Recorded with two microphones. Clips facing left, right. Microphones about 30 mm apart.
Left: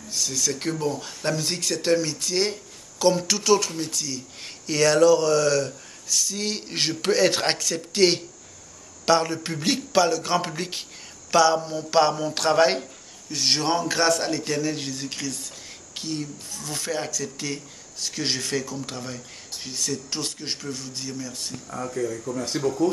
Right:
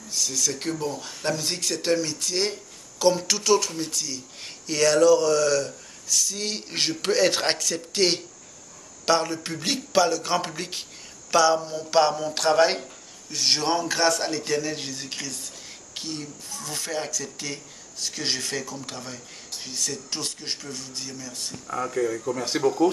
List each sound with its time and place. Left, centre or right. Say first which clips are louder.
0.1 s speech: even; centre
21.6 s speech: right 3 dB; right